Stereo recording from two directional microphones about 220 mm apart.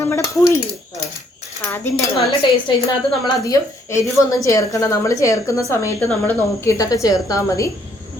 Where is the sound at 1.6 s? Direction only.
10° left (ahead or behind).